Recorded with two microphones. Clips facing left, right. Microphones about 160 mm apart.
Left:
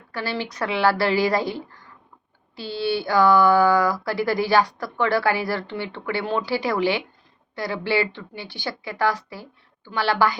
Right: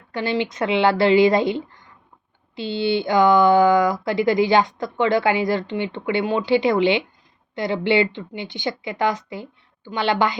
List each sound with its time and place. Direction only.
0.1 s speech: 20° right (ahead or behind)